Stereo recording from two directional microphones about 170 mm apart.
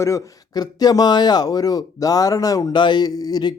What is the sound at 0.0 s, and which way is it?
Speech, 20° left (ahead or behind).